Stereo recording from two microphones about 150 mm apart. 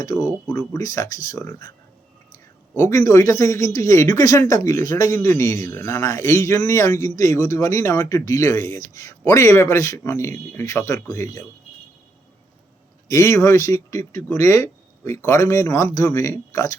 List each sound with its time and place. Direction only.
0.0 s speech: 25° left (ahead or behind)
2.3 s a sound: 20° left (ahead or behind)
3.1 s speech: 20° left (ahead or behind)
13.1 s speech: 20° left (ahead or behind)